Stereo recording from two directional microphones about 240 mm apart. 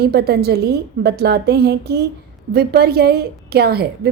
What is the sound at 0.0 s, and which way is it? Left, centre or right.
A woman's voice, right.